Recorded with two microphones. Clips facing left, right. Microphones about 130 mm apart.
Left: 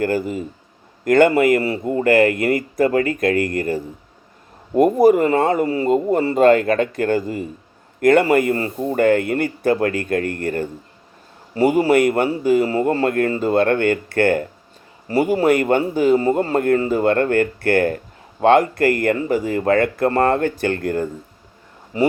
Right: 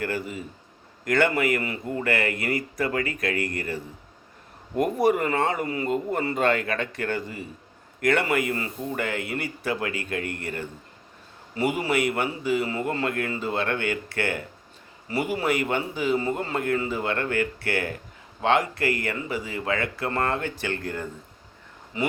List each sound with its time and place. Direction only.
0.0 s a man's voice: 40° left (ahead or behind)